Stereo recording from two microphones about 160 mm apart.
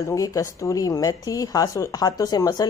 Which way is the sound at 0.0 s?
20° left (ahead or behind).